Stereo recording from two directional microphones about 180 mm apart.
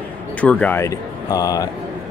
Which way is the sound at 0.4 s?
10° left (ahead or behind).